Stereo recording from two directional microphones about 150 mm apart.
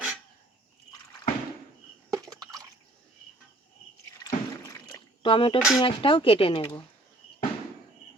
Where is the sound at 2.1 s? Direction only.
25° right (ahead or behind).